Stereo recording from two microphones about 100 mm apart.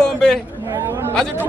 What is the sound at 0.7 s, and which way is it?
Chatter, 25° right (ahead or behind).